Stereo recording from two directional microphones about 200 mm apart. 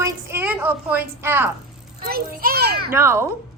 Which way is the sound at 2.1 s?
50° right (ahead or behind).